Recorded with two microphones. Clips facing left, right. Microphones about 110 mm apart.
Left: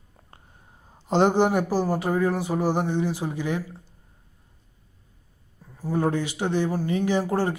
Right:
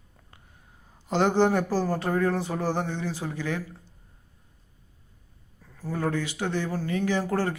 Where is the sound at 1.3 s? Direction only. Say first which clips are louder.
Left 1 dB; 15° left (ahead or behind).